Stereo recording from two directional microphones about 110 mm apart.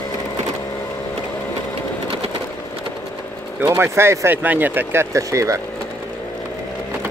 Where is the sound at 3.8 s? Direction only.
25° right (ahead or behind).